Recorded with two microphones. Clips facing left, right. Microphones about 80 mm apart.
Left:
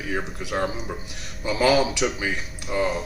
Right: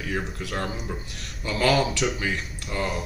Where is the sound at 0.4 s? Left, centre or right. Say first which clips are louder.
Left 4 dB; centre.